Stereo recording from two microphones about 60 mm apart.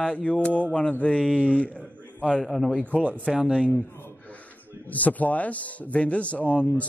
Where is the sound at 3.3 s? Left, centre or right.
Centre.